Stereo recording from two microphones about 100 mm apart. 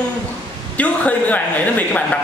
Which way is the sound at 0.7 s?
15° left (ahead or behind).